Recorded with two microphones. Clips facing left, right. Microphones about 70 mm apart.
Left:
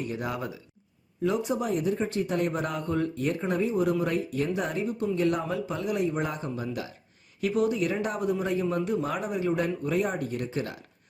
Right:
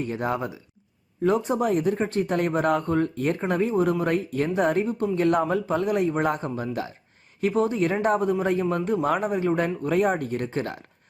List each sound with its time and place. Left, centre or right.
0.0 s speech: right